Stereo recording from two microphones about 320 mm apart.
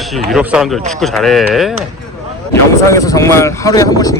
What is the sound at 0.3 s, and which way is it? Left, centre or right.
Speech, centre.